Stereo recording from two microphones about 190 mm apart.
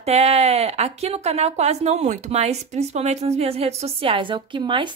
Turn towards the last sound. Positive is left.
turn(degrees=-25)  # may be behind; listen again after turning